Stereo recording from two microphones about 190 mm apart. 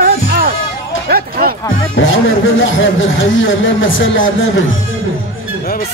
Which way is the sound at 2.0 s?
90° left.